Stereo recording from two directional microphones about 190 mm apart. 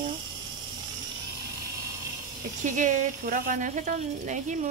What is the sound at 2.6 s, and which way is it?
Speech, 40° right (ahead or behind).